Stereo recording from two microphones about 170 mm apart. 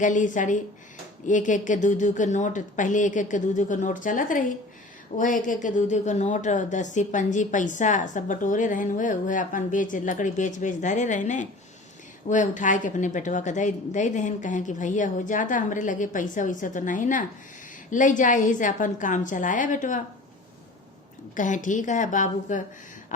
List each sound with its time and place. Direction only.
0.0 s a woman's voice: 50° left (ahead or behind)
21.3 s a woman's voice: 50° left (ahead or behind)